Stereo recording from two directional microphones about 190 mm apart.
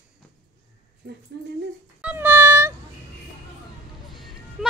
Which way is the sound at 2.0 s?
10° right (ahead or behind).